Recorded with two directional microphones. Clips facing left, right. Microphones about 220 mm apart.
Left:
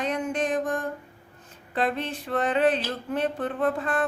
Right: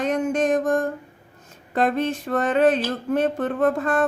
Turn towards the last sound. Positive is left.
turn(degrees=-45)  # may be behind; listen again after turning